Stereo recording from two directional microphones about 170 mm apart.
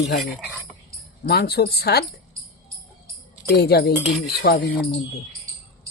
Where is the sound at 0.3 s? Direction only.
Centre (ahead or behind).